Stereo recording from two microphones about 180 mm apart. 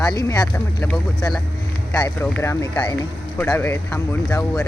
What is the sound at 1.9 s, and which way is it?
Speech, 15° left (ahead or behind).